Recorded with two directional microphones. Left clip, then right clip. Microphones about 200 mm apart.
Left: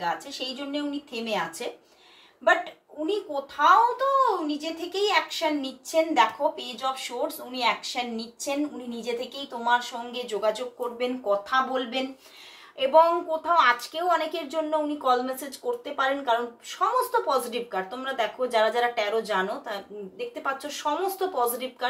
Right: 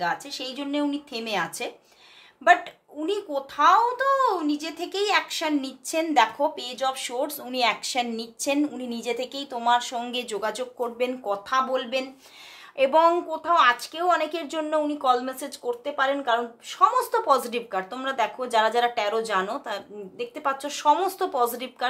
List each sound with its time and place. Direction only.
0.0 s a child's voice: 55° right (ahead or behind)
3.1 s a child's voice: 55° right (ahead or behind)
9.6 s a child's voice: 50° right (ahead or behind)